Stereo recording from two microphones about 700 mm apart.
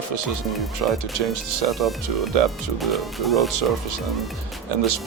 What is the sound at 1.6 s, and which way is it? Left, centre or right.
Speech, centre.